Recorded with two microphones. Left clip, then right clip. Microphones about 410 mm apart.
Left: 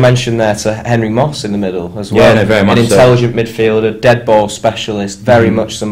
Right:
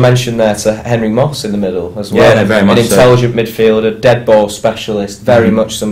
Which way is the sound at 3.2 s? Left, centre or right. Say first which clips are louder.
Right 1 dB; left.